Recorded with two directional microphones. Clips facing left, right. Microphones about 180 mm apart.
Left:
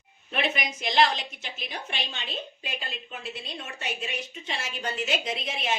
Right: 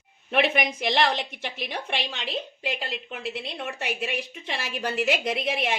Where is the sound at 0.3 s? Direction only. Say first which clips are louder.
Right 6 dB; 65° right (ahead or behind).